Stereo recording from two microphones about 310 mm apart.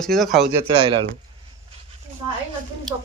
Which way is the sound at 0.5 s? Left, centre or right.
Centre.